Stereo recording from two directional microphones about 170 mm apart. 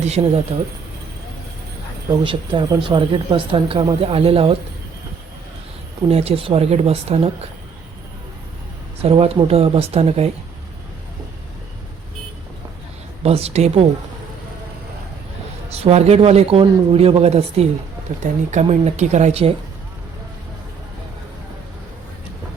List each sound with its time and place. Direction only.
0.0 s speech: 40° right (ahead or behind)
2.2 s speech: 30° right (ahead or behind)
6.1 s speech: 35° right (ahead or behind)
9.0 s speech: 35° right (ahead or behind)
13.2 s speech: 35° right (ahead or behind)
15.7 s speech: 35° right (ahead or behind)